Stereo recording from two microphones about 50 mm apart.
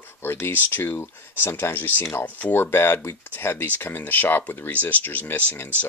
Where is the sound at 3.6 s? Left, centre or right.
Left.